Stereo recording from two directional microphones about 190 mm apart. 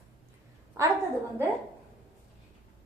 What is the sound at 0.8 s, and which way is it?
Speech, 15° right (ahead or behind).